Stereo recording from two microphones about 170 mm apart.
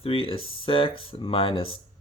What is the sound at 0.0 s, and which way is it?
Speech, 35° left (ahead or behind).